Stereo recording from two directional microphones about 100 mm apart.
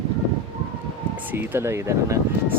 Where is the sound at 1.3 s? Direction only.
20° right (ahead or behind).